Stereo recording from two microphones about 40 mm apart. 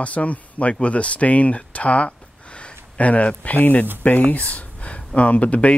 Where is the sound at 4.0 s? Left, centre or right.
Left.